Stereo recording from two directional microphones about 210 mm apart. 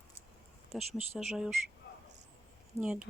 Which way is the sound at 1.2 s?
Centre (ahead or behind).